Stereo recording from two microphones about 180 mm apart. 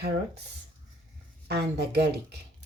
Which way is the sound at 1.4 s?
65° right (ahead or behind).